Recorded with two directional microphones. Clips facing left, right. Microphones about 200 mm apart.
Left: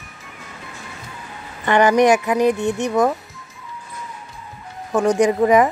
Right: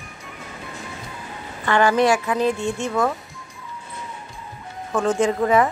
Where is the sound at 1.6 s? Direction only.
20° left (ahead or behind).